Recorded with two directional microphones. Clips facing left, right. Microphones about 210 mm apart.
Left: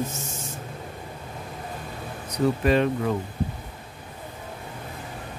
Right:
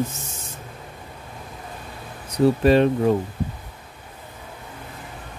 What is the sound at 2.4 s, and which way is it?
Speech, 35° right (ahead or behind).